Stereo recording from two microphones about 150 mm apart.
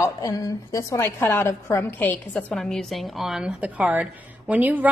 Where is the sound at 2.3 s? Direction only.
Centre (ahead or behind).